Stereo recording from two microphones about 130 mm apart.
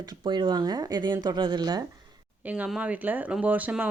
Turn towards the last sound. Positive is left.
turn(degrees=-10)  # may be behind; listen again after turning